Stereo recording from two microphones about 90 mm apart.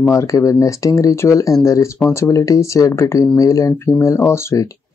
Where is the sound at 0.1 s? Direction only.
35° left (ahead or behind).